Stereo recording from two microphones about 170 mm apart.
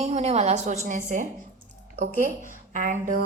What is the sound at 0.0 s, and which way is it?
A woman's voice, 40° right (ahead or behind).